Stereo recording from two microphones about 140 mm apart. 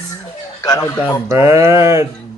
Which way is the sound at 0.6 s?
20° left (ahead or behind).